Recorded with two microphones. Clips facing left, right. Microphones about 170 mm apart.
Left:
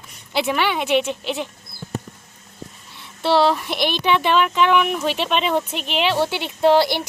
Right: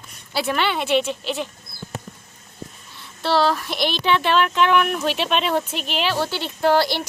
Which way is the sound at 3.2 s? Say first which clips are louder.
Left 2 dB; 20° left (ahead or behind).